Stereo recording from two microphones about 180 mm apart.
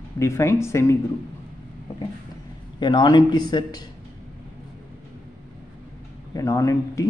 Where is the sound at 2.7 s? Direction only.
25° left (ahead or behind).